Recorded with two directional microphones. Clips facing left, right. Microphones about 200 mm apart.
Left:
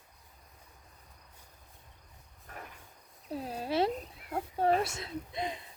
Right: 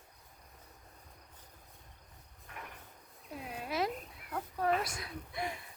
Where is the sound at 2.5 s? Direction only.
40° left (ahead or behind).